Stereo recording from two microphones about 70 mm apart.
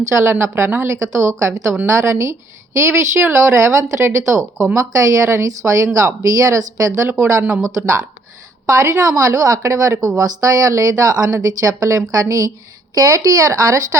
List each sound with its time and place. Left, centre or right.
0.1 s a woman's voice: right